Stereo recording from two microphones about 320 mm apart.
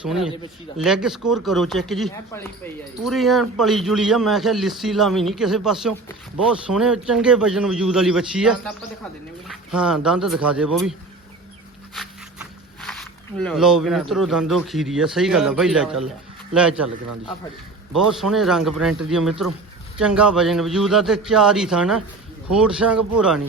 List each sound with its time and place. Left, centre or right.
0.0 s a man's voice: centre
11.9 s a man's voice: centre
18.1 s a man's voice: centre